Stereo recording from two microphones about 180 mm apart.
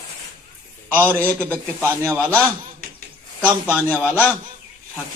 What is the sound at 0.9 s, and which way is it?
A man's voice, 10° right (ahead or behind).